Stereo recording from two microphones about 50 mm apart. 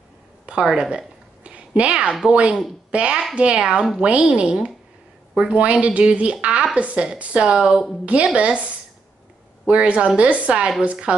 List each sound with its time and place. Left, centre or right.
0.5 s a woman's voice: centre
8.0 s a woman's voice: right